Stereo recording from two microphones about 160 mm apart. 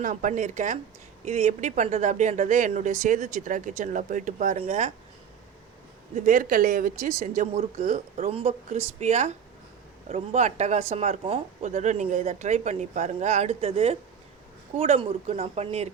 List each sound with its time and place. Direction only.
0.0 s speech: 55° right (ahead or behind)
4.5 s speech: 40° right (ahead or behind)
6.1 s speech: 55° right (ahead or behind)
7.9 s speech: 45° right (ahead or behind)
11.6 s speech: 50° right (ahead or behind)